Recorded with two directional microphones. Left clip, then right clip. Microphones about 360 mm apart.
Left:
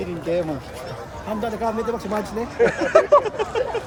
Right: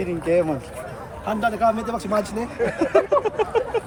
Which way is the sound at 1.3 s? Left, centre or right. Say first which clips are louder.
Right 5 dB; centre.